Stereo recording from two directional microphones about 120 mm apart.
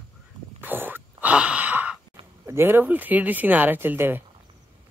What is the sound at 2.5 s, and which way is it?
Speech, 20° right (ahead or behind).